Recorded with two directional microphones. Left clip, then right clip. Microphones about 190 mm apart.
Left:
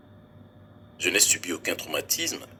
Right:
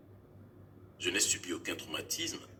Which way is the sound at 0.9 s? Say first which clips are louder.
Left 9 dB; 50° left (ahead or behind).